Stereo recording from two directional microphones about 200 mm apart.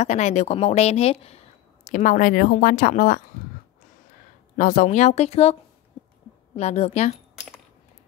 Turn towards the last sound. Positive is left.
turn(degrees=35)  # may be behind; listen again after turning